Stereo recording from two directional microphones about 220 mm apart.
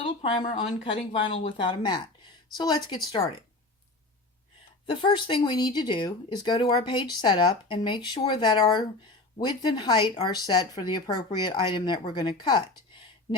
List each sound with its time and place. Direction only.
0.2 s speech: 25° left (ahead or behind)
4.9 s speech: 20° left (ahead or behind)